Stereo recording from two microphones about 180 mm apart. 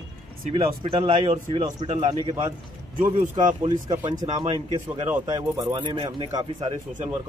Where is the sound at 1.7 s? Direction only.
40° right (ahead or behind).